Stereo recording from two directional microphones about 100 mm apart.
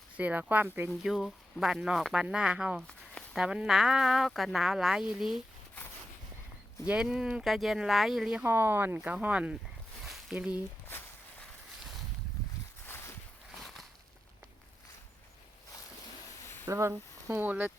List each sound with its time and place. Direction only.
0.2 s speech: 15° right (ahead or behind)
0.9 s speech: centre (ahead or behind)
6.8 s speech: 10° right (ahead or behind)
8.4 s speech: 20° right (ahead or behind)
12.8 s a sound: 25° left (ahead or behind)
13.6 s a sound: centre (ahead or behind)
16.6 s speech: 30° right (ahead or behind)